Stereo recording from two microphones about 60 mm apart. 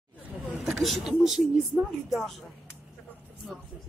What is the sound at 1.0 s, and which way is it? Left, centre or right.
Speech, centre.